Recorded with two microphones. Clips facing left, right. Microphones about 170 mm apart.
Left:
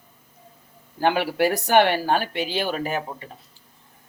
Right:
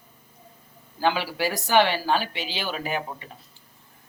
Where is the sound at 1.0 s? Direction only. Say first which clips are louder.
Left 4 dB; 55° left (ahead or behind).